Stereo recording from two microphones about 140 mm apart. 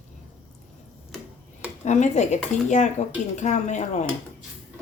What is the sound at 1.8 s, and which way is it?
Speech, 60° left (ahead or behind).